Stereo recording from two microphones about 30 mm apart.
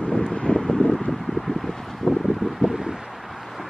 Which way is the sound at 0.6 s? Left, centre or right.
Centre.